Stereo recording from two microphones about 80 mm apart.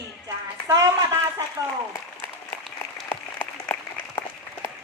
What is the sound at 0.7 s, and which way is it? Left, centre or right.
Speech, right.